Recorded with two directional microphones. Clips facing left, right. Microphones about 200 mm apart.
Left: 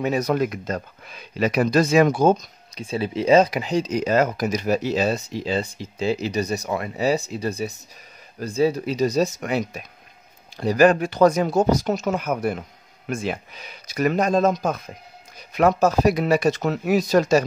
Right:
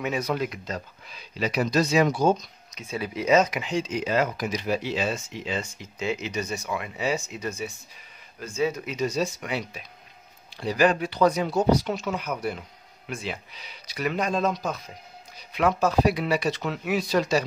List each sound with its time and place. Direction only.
0.0 s speech: 40° left (ahead or behind)
2.7 s speech: 30° left (ahead or behind)